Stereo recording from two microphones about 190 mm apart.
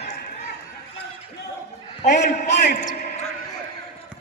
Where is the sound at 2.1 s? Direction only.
60° left (ahead or behind).